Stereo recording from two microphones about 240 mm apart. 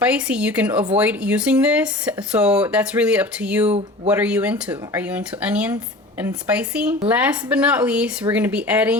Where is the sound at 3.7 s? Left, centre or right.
Right.